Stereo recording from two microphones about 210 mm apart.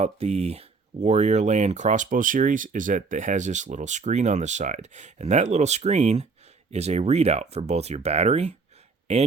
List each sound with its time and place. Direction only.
0.0 s speech: 30° right (ahead or behind)